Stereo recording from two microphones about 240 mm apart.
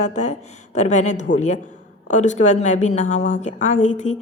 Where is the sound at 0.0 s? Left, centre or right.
Left.